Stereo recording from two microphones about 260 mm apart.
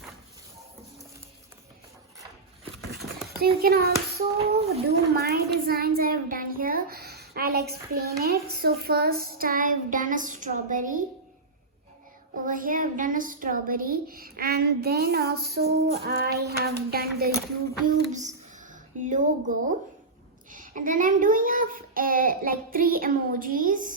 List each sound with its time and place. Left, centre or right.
3.4 s a child's voice: right
12.5 s a child's voice: right